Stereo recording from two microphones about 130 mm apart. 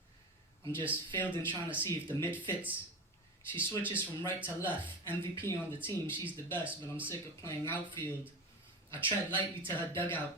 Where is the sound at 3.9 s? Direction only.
15° left (ahead or behind).